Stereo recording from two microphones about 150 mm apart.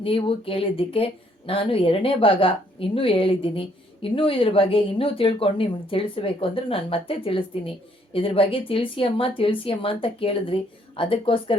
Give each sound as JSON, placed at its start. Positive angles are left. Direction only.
{"t": 0.0, "sound": "speech", "side_deg": 40}